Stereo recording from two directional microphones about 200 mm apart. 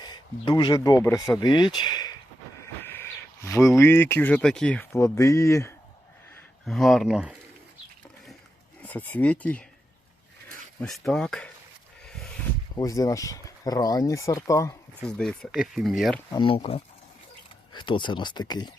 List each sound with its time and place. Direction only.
0.0 s speech: 20° left (ahead or behind)
6.7 s speech: centre (ahead or behind)
8.8 s speech: 10° left (ahead or behind)
10.8 s speech: centre (ahead or behind)
12.0 s a sound: 5° left (ahead or behind)
12.7 s speech: 15° left (ahead or behind)
15.0 s speech: 5° left (ahead or behind)
16.3 s speech: 20° left (ahead or behind)